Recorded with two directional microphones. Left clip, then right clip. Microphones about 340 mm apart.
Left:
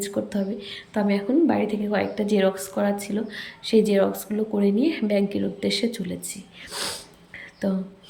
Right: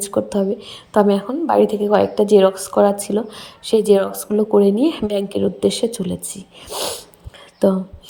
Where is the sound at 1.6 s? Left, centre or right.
Centre.